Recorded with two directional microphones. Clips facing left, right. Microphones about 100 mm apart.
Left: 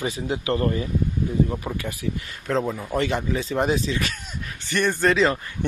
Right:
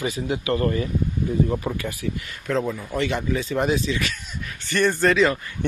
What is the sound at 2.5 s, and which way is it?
Speech, 25° left (ahead or behind).